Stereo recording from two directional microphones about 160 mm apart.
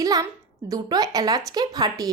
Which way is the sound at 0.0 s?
20° right (ahead or behind).